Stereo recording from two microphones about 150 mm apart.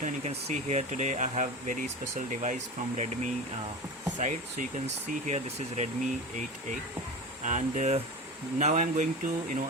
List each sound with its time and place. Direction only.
0.0 s speech: 50° right (ahead or behind)